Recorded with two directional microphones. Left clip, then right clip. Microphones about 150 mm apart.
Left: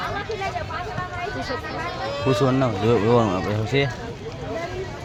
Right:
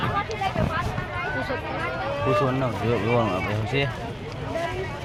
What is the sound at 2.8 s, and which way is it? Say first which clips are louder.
Speech: left 5 dB; 90° left.